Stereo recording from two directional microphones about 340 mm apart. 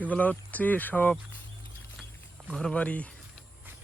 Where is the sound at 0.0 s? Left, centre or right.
Centre.